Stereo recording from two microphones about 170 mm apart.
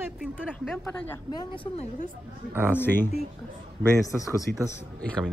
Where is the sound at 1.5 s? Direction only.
35° left (ahead or behind).